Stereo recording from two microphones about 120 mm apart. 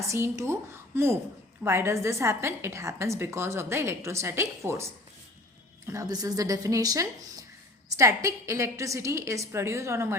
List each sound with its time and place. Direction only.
0.1 s a woman's voice: 25° right (ahead or behind)